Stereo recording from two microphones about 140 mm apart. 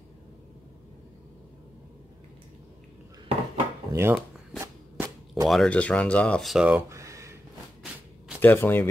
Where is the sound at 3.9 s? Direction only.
20° right (ahead or behind).